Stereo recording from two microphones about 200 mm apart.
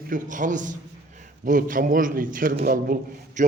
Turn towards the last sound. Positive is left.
turn(degrees=-45)  # may be behind; listen again after turning